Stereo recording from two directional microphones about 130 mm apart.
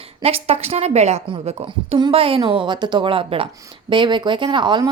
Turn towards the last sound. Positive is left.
turn(degrees=-35)  # may be behind; listen again after turning